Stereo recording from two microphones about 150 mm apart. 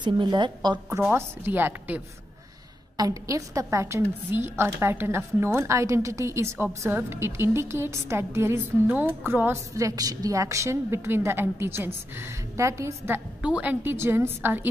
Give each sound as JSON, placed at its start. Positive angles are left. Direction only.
{"t": 0.0, "sound": "a woman's voice", "side_deg": -30}
{"t": 1.1, "sound": "a woman's voice", "side_deg": -15}